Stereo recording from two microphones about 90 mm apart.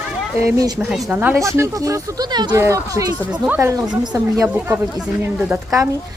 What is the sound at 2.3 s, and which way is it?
Speech, 55° right (ahead or behind).